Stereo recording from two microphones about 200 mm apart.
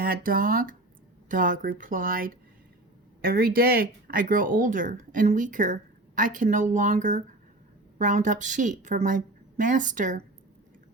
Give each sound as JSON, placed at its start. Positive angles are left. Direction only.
{"t": 0.0, "sound": "a woman's voice", "side_deg": -45}